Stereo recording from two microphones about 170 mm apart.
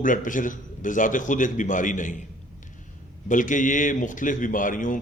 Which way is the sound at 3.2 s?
50° left (ahead or behind).